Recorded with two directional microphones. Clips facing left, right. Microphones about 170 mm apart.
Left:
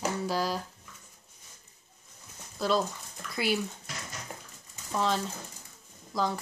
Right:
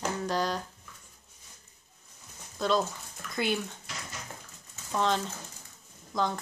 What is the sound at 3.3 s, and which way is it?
Speech, 5° left (ahead or behind).